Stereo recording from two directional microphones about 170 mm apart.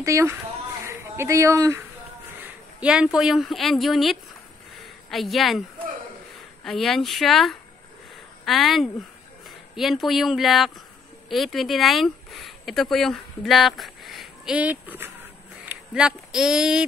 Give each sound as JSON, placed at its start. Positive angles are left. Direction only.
{"t": 0.0, "sound": "a woman's voice", "side_deg": -15}
{"t": 2.4, "sound": "speech", "side_deg": -5}
{"t": 6.6, "sound": "speech", "side_deg": 0}